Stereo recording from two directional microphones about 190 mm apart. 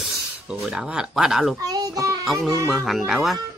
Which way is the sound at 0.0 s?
Centre (ahead or behind).